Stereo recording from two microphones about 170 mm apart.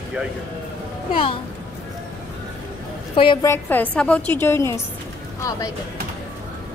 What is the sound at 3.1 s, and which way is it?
Speech, 30° left (ahead or behind).